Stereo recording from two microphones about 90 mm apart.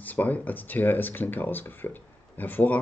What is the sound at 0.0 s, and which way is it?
Speech, 20° left (ahead or behind).